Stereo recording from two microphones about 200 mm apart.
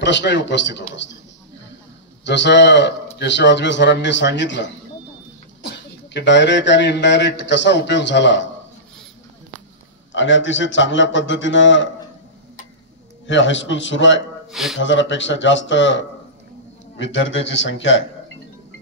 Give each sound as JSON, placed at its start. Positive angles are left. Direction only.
{"t": 0.0, "sound": "a man's voice", "side_deg": 60}
{"t": 2.2, "sound": "a man's voice", "side_deg": 60}
{"t": 10.1, "sound": "a man's voice", "side_deg": 65}
{"t": 13.3, "sound": "a man's voice", "side_deg": 65}
{"t": 14.5, "sound": "speech", "side_deg": 0}
{"t": 14.8, "sound": "a man's voice", "side_deg": 65}
{"t": 17.0, "sound": "a man's voice", "side_deg": 70}